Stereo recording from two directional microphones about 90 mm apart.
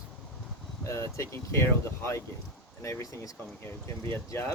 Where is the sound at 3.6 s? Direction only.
30° left (ahead or behind).